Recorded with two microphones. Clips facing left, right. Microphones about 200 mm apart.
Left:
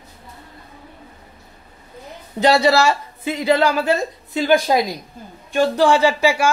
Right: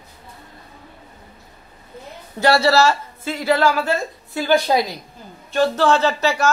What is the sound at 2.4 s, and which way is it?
A woman's voice, 15° left (ahead or behind).